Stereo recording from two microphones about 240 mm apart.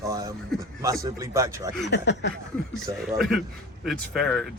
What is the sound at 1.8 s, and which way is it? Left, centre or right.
Speech, left.